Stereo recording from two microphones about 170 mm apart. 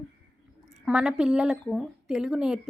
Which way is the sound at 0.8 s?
5° right (ahead or behind).